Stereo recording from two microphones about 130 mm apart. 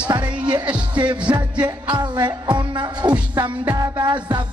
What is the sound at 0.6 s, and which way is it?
Music, 10° right (ahead or behind).